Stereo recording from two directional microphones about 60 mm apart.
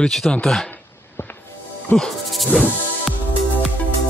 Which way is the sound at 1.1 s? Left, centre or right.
Left.